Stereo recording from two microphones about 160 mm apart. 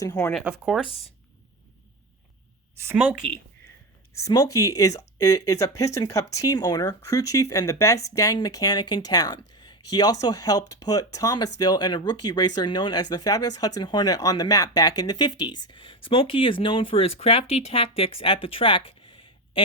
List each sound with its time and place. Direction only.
0.0 s speech: 20° left (ahead or behind)
0.3 s speech: 5° right (ahead or behind)
0.9 s speech: 40° left (ahead or behind)
2.7 s a woman's voice: 15° right (ahead or behind)
4.1 s speech: 20° left (ahead or behind)